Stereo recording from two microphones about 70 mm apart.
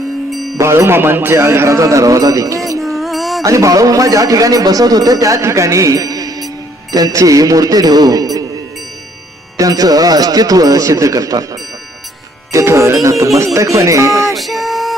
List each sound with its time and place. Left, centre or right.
0.6 s a man's voice: right
2.8 s music: centre
3.4 s speech: right
9.6 s speech: right
12.5 s a man's voice: right
14.3 s music: centre